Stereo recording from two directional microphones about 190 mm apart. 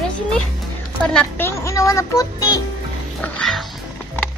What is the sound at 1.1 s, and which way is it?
Music, 10° left (ahead or behind).